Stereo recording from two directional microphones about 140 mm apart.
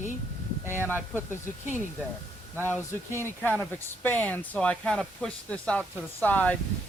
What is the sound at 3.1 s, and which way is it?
Speech, 15° left (ahead or behind).